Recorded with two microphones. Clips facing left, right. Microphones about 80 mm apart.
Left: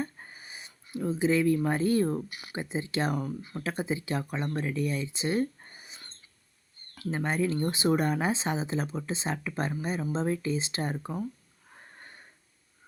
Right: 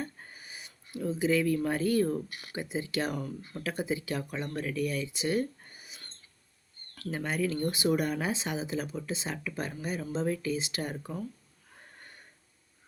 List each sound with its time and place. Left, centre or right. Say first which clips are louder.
0.0 s a sound: left 4 dB; left
1.6 s speech: left 2 dB; left
2.3 s speech: left 2 dB; centre
2.6 s speech: left 2 dB; left
3.2 s speech: left 3 dB; centre
3.6 s speech: even; left
7.1 s speech: left 3 dB; left